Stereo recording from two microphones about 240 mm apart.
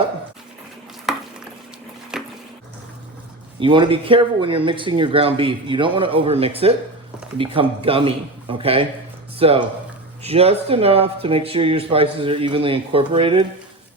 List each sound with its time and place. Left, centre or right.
1.1 s stir: centre
2.1 s a sound: centre
3.6 s speech: right